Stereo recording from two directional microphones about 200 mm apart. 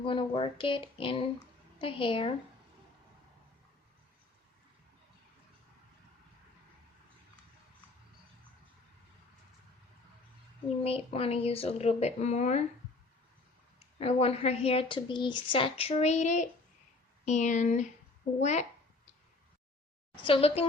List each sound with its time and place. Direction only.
0.0 s speech: 25° left (ahead or behind)
10.8 s speech: 30° left (ahead or behind)
13.7 s speech: 30° left (ahead or behind)
20.2 s speech: 30° left (ahead or behind)